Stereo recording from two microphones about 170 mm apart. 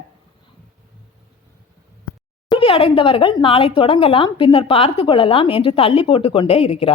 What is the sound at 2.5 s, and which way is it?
Speech, 30° left (ahead or behind).